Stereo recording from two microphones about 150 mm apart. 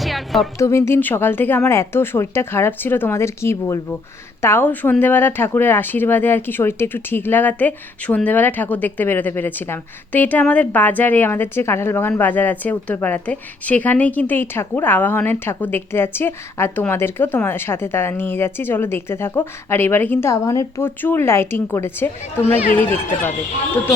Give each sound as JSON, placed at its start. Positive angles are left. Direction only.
{"t": 0.0, "sound": "music", "side_deg": 0}
{"t": 0.6, "sound": "speech", "side_deg": 20}